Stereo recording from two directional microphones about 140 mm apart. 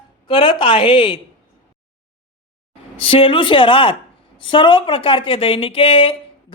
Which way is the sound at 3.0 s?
40° left (ahead or behind).